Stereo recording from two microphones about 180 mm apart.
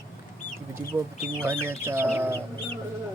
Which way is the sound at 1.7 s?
10° right (ahead or behind).